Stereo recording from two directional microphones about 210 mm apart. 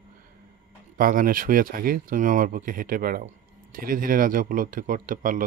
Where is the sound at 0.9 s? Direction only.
40° right (ahead or behind).